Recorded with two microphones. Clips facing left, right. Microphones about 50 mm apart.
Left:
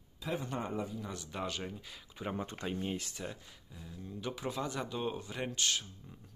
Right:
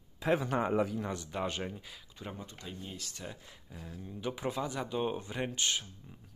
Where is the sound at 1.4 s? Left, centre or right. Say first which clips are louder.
Right 2 dB; right.